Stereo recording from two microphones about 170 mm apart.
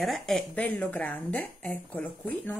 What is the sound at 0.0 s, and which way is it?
A woman's voice, centre (ahead or behind).